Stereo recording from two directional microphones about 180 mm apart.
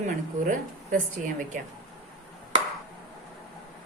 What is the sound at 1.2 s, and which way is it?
Speech, 45° right (ahead or behind).